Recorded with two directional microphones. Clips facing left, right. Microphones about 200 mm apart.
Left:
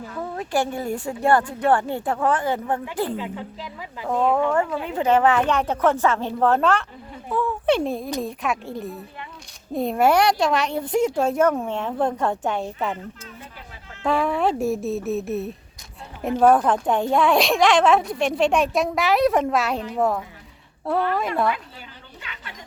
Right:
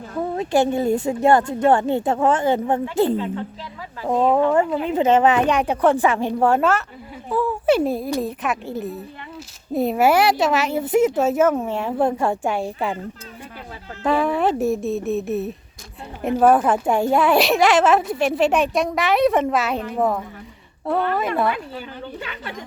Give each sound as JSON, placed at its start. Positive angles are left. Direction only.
{"t": 0.2, "sound": "a woman's voice", "side_deg": -20}
{"t": 3.2, "sound": "a woman's voice", "side_deg": 10}
{"t": 4.1, "sound": "a woman's voice", "side_deg": -20}
{"t": 14.0, "sound": "a woman's voice", "side_deg": 0}